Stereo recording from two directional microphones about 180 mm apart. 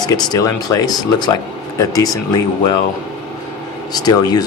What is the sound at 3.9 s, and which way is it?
Speech, 20° left (ahead or behind).